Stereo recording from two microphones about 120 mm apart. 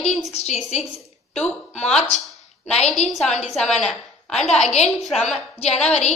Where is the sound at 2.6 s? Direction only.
65° left (ahead or behind).